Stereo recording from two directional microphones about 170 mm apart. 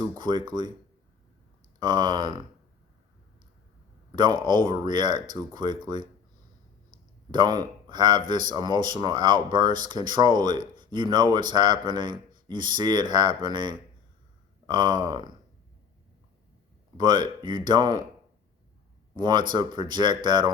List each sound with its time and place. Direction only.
0.2 s speech: 25° right (ahead or behind)
1.8 s speech: 25° right (ahead or behind)
4.1 s speech: 25° right (ahead or behind)
7.3 s speech: 25° right (ahead or behind)
17.0 s speech: 25° right (ahead or behind)
19.1 s speech: 25° right (ahead or behind)